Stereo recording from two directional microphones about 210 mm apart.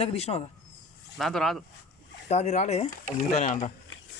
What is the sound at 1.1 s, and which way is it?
Speech, centre (ahead or behind).